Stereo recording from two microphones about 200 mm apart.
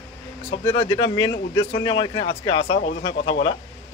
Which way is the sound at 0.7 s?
25° left (ahead or behind).